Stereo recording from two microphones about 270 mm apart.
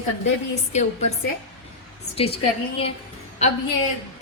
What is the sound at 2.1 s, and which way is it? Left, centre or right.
Speech, left.